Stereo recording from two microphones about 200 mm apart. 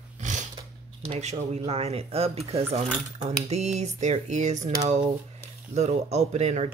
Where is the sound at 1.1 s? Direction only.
35° right (ahead or behind).